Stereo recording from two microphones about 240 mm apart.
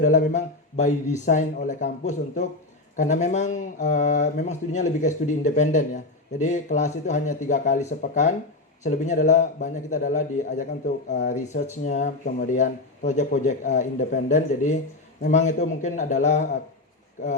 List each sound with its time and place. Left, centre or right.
0.0 s speech: left